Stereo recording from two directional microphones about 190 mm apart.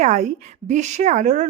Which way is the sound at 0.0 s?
40° right (ahead or behind).